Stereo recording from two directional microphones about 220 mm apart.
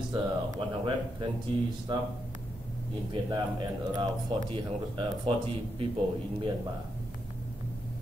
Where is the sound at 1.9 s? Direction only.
20° right (ahead or behind).